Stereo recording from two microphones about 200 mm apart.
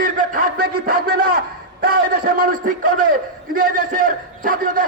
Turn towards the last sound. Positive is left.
turn(degrees=-45)  # may be behind; listen again after turning